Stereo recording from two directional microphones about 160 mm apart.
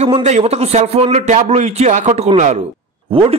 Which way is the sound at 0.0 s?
45° right (ahead or behind).